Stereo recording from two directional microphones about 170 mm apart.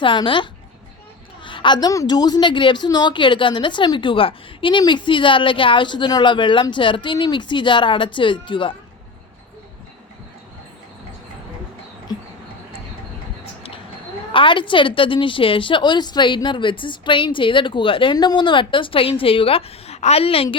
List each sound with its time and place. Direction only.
0.0 s a woman's voice: 30° left (ahead or behind)
1.5 s a woman's voice: 30° left (ahead or behind)
12.1 s mouse: 25° left (ahead or behind)
14.3 s a woman's voice: 30° left (ahead or behind)